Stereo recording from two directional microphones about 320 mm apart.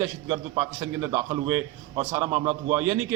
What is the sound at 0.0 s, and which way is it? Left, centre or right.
A man's voice, centre.